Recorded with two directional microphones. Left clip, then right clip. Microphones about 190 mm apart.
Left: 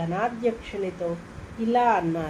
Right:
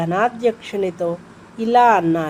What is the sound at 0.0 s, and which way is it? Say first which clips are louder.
A woman's voice: right 8 dB; 70° right (ahead or behind).